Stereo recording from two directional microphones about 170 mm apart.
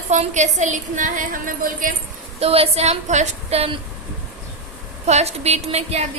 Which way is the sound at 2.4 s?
35° right (ahead or behind).